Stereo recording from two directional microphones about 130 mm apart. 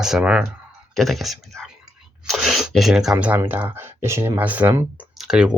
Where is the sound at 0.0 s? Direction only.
5° right (ahead or behind).